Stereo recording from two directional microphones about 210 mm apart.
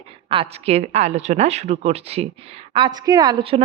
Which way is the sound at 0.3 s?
25° right (ahead or behind).